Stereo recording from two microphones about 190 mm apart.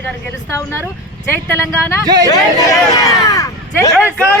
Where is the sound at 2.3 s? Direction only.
20° left (ahead or behind).